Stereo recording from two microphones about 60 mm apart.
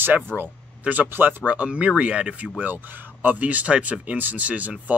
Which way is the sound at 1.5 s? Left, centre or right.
Centre.